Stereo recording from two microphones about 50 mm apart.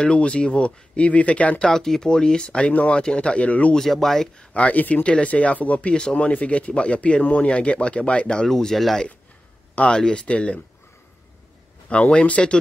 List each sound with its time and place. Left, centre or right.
0.0 s speech: centre
1.6 s speech: centre
2.7 s speech: left
3.7 s speech: centre
4.6 s speech: left
5.0 s speech: left
8.5 s speech: centre
11.9 s speech: left